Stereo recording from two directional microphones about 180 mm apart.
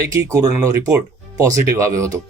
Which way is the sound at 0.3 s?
20° right (ahead or behind).